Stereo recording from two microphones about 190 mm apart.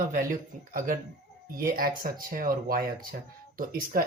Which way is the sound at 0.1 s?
50° right (ahead or behind).